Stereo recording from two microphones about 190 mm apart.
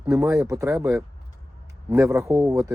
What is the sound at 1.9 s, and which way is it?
Speech, 15° right (ahead or behind).